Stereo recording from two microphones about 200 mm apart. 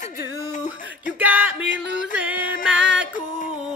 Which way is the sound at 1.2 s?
10° right (ahead or behind).